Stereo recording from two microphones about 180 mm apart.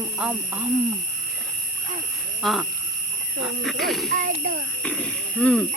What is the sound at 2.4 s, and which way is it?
Speech, centre (ahead or behind).